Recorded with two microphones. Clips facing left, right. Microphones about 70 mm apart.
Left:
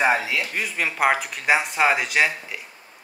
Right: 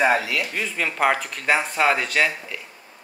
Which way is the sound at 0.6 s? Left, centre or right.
Centre.